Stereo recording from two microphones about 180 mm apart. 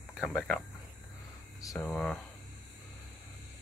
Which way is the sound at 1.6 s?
20° left (ahead or behind).